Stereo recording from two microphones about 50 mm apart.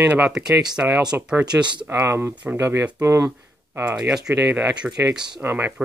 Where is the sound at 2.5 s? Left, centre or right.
Right.